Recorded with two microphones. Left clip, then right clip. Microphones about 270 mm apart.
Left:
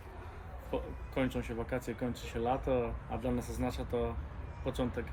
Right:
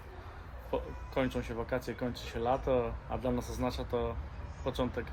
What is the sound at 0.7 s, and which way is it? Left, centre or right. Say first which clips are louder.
Speech: right 2 dB; centre.